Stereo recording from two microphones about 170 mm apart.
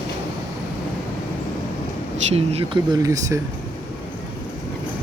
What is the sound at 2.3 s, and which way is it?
Speech, 35° right (ahead or behind).